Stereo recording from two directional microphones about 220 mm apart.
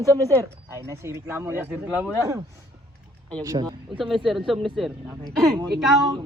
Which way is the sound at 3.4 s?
15° right (ahead or behind).